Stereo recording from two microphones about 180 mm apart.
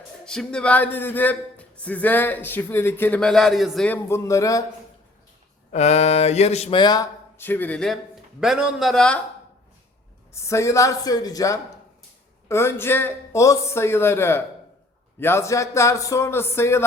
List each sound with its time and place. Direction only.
0.3 s speech: 5° left (ahead or behind)
5.7 s speech: 40° left (ahead or behind); by 9.2 s 5° left (ahead or behind)
10.3 s speech: 15° left (ahead or behind)